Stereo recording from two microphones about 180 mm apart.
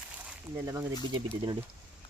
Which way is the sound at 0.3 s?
15° right (ahead or behind).